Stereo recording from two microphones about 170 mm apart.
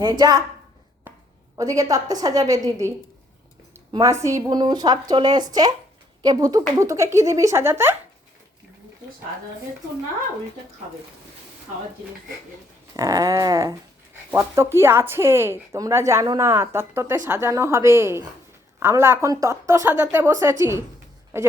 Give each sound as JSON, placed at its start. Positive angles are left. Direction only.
{"t": 0.0, "sound": "speech", "side_deg": -25}
{"t": 1.1, "sound": "a sound", "side_deg": -10}
{"t": 1.5, "sound": "speech", "side_deg": -20}
{"t": 3.9, "sound": "speech", "side_deg": -20}
{"t": 12.9, "sound": "speech", "side_deg": -20}